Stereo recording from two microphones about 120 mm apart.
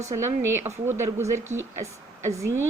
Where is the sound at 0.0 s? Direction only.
25° right (ahead or behind).